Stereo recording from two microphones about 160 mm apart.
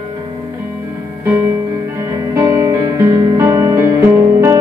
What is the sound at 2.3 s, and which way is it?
Music, 20° right (ahead or behind).